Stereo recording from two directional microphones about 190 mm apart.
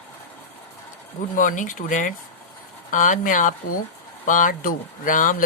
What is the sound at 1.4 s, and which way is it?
Speech, 45° left (ahead or behind).